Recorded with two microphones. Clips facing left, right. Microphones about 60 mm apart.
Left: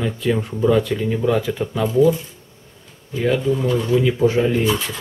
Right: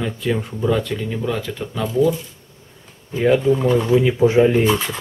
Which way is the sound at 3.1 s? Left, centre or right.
Right.